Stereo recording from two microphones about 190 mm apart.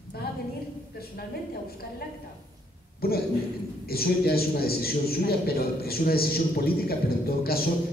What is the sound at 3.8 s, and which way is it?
A man's voice, 55° left (ahead or behind).